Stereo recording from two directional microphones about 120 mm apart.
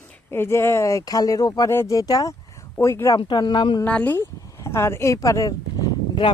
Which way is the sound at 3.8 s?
15° left (ahead or behind).